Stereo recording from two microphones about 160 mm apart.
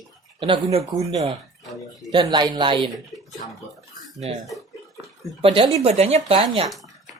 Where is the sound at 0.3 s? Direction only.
35° right (ahead or behind).